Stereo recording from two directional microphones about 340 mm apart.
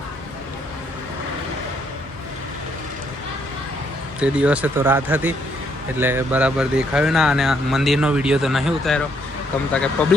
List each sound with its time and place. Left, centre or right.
4.2 s speech: centre